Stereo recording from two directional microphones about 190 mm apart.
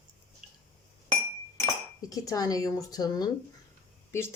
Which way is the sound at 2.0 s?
20° left (ahead or behind).